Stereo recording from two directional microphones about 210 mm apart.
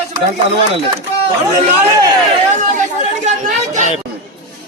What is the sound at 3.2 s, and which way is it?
Speech, 35° right (ahead or behind).